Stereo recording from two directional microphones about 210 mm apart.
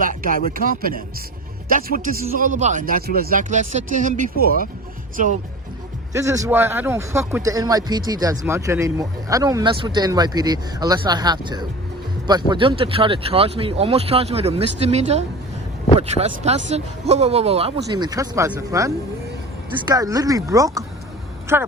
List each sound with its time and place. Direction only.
0.0 s speech: 40° right (ahead or behind)
6.1 s speech: 15° right (ahead or behind)
17.8 s speech: 20° right (ahead or behind)